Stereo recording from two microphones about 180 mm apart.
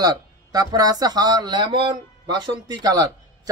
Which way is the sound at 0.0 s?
20° right (ahead or behind).